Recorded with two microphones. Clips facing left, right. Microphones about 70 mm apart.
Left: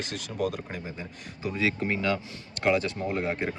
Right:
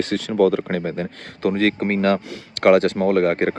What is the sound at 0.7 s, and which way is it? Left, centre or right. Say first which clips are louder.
Speech: right 13 dB; right.